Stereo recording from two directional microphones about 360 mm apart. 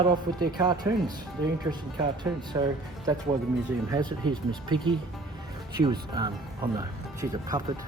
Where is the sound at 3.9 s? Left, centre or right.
Centre.